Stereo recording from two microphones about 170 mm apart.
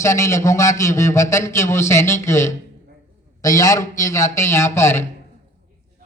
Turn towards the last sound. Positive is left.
turn(degrees=15)  # may be behind; listen again after turning